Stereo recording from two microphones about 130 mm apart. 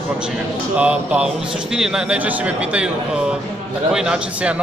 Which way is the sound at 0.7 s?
10° right (ahead or behind).